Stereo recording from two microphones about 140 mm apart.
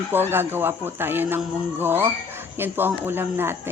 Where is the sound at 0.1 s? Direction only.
15° right (ahead or behind).